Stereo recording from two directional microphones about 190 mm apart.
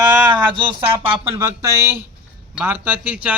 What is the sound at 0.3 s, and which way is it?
Speech, 25° right (ahead or behind).